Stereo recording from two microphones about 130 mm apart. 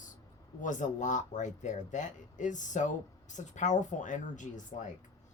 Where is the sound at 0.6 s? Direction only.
75° left (ahead or behind).